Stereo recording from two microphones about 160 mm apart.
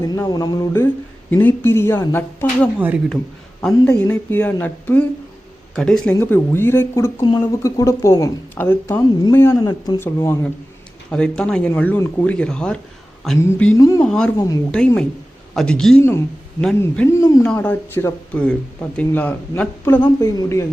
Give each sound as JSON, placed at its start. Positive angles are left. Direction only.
{"t": 0.0, "sound": "a woman's voice", "side_deg": 25}
{"t": 1.3, "sound": "speech", "side_deg": 10}
{"t": 2.7, "sound": "a woman's voice", "side_deg": -10}
{"t": 4.1, "sound": "a woman's voice", "side_deg": 10}
{"t": 11.1, "sound": "speech", "side_deg": 5}
{"t": 13.7, "sound": "a woman's voice", "side_deg": 20}
{"t": 14.0, "sound": "speech", "side_deg": 5}
{"t": 14.3, "sound": "a woman's voice", "side_deg": 20}
{"t": 14.7, "sound": "speech", "side_deg": 5}
{"t": 17.1, "sound": "a woman's voice", "side_deg": 20}
{"t": 17.4, "sound": "speech", "side_deg": 5}